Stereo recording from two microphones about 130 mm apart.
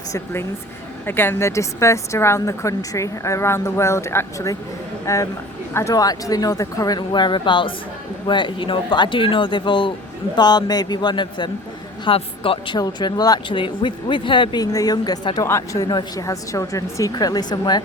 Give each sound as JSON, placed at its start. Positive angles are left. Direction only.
{"t": 1.0, "sound": "a woman's voice", "side_deg": 15}
{"t": 15.4, "sound": "a woman's voice", "side_deg": 20}